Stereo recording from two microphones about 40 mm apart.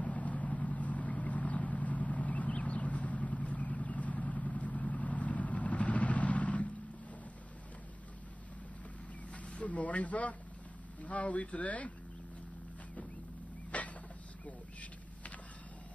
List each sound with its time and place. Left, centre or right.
0.0 s vehicle: left
9.3 s speech: left
13.7 s a sound: left